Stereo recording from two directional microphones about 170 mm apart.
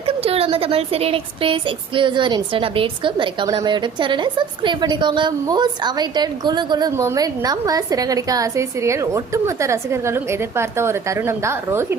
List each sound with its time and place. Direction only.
0.2 s a woman's voice: 35° right (ahead or behind); by 11.9 s 15° right (ahead or behind)